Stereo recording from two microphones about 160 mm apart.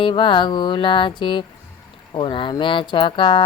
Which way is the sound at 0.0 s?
30° left (ahead or behind).